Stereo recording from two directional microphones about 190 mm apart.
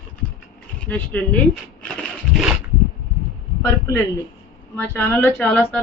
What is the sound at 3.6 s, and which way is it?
A man's voice, 15° left (ahead or behind).